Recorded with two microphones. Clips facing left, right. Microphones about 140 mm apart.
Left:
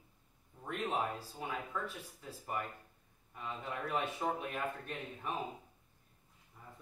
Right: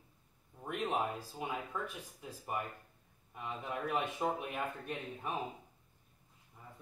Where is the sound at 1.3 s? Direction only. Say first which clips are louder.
Right 1 dB; 15° right (ahead or behind).